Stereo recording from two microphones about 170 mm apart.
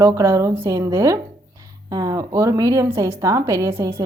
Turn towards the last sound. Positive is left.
turn(degrees=-15)  # may be behind; listen again after turning